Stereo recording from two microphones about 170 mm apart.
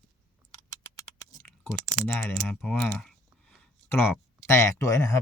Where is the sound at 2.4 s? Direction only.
5° left (ahead or behind).